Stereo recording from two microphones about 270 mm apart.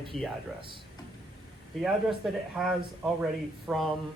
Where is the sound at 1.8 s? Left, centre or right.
Centre.